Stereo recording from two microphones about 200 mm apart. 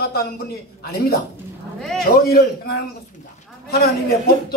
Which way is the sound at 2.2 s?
50° left (ahead or behind).